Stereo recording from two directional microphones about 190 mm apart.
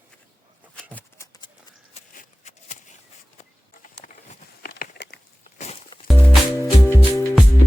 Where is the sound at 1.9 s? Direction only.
35° left (ahead or behind).